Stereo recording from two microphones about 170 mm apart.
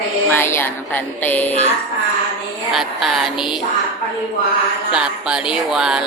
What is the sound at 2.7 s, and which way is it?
Music, centre (ahead or behind).